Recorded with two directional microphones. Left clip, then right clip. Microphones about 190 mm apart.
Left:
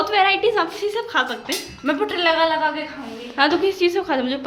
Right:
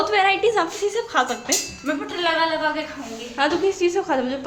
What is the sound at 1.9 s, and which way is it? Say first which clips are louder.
Speech: left 4 dB; 60° left (ahead or behind).